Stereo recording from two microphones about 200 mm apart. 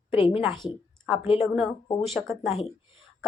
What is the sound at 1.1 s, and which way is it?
Speech, 30° left (ahead or behind).